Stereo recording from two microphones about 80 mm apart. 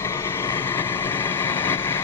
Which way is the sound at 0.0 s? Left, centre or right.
Left.